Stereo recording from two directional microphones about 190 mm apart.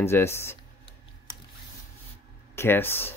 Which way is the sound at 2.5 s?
10° left (ahead or behind).